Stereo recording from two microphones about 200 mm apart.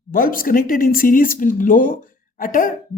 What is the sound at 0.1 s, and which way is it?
A woman's voice, 45° left (ahead or behind).